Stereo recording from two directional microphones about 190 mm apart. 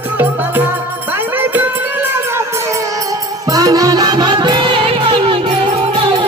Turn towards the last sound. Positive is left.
turn(degrees=-25)  # may be behind; listen again after turning